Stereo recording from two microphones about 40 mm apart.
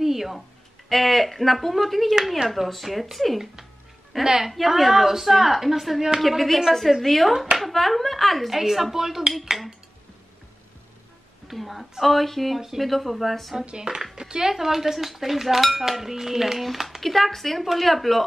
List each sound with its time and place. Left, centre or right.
0.0 s a sound: centre
0.8 s speech: centre
4.2 s dishes: centre
4.5 s speech: centre
6.2 s speech: centre
9.5 s dishes: centre
11.4 s a woman's voice: centre
13.7 s speech: right
14.1 s dishes: centre
16.6 s speech: centre